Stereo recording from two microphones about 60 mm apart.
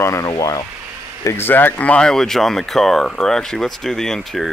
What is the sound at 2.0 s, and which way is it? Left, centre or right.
Speech, centre.